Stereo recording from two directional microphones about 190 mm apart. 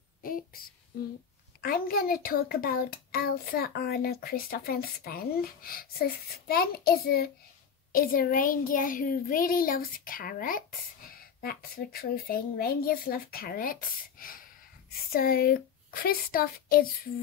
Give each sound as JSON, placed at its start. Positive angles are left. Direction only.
{"t": 1.6, "sound": "a child's voice", "side_deg": 50}